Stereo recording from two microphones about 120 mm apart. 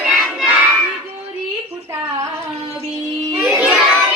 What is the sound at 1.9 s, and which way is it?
Female singing, 25° right (ahead or behind).